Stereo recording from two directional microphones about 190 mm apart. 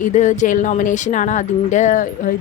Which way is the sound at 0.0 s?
40° left (ahead or behind).